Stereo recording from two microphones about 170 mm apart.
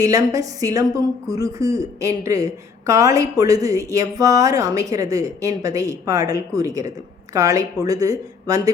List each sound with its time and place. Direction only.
0.0 s a woman's voice: 20° right (ahead or behind)